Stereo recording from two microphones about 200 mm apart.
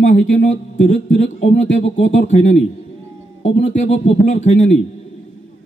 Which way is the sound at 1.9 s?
35° left (ahead or behind).